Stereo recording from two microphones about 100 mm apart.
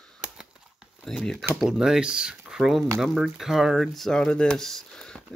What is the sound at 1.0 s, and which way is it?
Speech, 5° left (ahead or behind).